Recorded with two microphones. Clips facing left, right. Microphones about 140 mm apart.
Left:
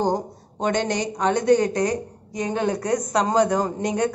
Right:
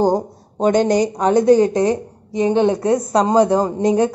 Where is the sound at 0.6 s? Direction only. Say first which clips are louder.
Right 8 dB; 35° right (ahead or behind).